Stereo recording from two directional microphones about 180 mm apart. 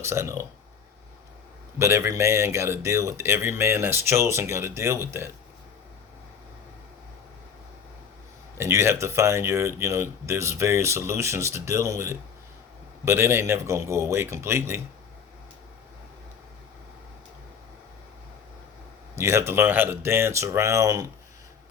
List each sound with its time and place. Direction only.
0.0 s speech: 15° right (ahead or behind)
1.8 s speech: 15° right (ahead or behind)
8.5 s speech: 15° right (ahead or behind)
19.1 s speech: 15° right (ahead or behind)